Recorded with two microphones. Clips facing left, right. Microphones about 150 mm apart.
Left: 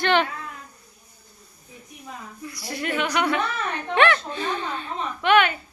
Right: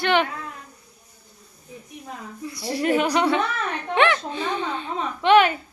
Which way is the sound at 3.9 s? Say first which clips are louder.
Even; 15° right (ahead or behind).